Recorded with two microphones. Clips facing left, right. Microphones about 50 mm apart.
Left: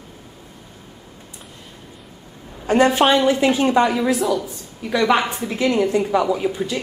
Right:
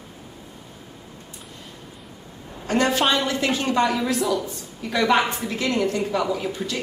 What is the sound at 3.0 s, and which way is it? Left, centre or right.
Speech, centre.